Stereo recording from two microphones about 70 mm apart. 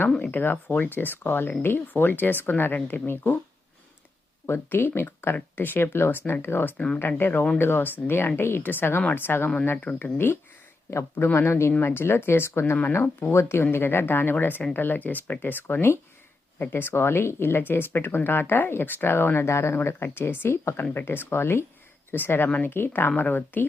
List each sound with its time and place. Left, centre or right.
0.2 s speech: left
4.4 s speech: left
6.7 s speech: centre
7.2 s speech: left